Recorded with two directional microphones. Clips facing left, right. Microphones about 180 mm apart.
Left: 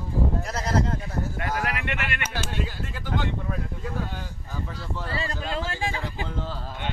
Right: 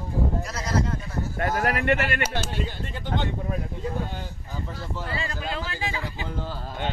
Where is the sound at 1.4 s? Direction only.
40° right (ahead or behind).